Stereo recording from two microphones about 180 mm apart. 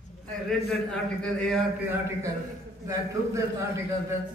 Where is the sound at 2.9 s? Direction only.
15° right (ahead or behind).